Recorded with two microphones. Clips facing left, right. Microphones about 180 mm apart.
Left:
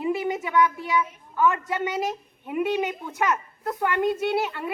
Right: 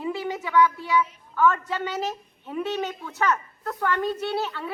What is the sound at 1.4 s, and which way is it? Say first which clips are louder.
A woman's voice: even; 15° left (ahead or behind).